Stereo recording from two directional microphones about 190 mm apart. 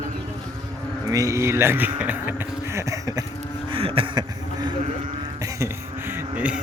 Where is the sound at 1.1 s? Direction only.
15° right (ahead or behind).